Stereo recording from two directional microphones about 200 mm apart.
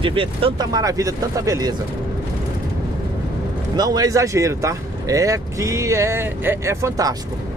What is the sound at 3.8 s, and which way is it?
Speech, 20° right (ahead or behind).